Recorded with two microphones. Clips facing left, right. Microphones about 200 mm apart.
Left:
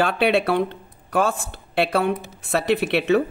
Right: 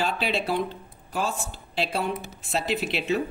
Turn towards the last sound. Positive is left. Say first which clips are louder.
# left 7 dB
turn(degrees=65)  # may be behind; listen again after turning